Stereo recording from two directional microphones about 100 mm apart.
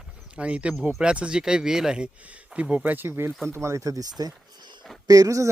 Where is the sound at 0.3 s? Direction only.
10° right (ahead or behind).